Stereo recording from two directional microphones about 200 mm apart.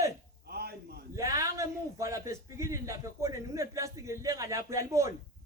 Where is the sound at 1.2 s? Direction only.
15° right (ahead or behind).